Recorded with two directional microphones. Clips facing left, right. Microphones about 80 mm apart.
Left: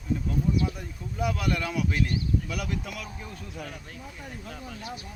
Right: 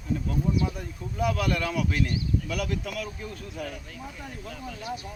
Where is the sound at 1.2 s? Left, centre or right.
Centre.